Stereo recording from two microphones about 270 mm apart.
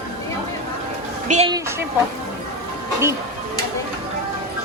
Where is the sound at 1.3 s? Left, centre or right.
Right.